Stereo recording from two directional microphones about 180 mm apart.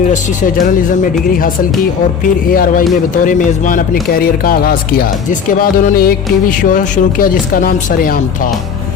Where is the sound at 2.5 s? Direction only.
50° left (ahead or behind).